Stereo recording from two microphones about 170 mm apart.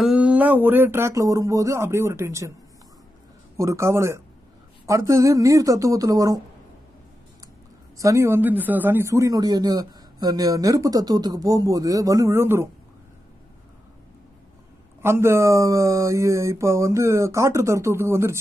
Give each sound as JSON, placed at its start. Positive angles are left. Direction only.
{"t": 0.0, "sound": "speech", "side_deg": -5}
{"t": 3.5, "sound": "speech", "side_deg": -15}
{"t": 8.0, "sound": "speech", "side_deg": -15}
{"t": 15.0, "sound": "speech", "side_deg": -15}